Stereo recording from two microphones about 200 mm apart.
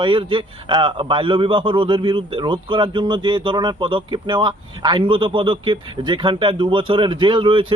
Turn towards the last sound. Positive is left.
turn(degrees=-25)  # may be behind; listen again after turning